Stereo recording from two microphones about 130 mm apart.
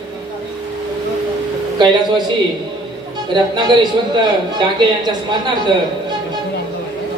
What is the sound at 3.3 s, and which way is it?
Speech, 35° right (ahead or behind).